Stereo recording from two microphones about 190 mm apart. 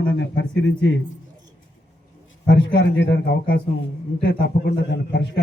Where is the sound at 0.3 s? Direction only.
75° left (ahead or behind).